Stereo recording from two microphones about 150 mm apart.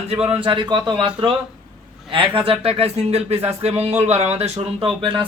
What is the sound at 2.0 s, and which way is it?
Speech, 40° right (ahead or behind).